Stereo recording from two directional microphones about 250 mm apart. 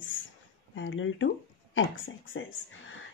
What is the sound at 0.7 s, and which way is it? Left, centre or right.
Speech, left.